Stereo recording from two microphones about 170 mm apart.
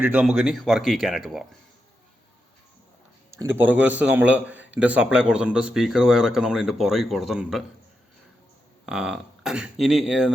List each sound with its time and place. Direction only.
0.0 s a man's voice: 5° right (ahead or behind)
3.3 s a man's voice: 15° right (ahead or behind)
8.9 s a man's voice: 5° right (ahead or behind)